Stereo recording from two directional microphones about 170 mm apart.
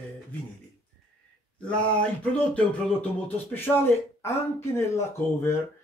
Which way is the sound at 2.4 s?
10° left (ahead or behind).